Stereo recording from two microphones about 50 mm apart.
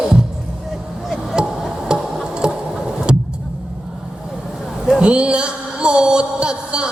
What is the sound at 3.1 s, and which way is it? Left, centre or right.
Vehicle, centre.